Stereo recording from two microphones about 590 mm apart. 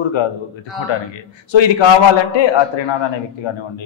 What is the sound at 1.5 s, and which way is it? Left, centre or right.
Speech, left.